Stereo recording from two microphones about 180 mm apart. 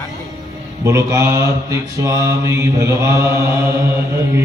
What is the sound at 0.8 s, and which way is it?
Mantra, 15° right (ahead or behind).